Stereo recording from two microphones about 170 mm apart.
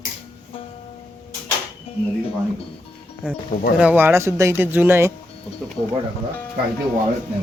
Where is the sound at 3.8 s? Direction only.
10° right (ahead or behind).